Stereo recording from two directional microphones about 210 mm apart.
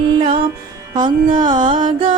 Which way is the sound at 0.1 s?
25° right (ahead or behind).